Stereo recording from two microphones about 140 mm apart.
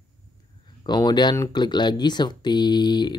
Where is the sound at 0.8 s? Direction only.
30° left (ahead or behind).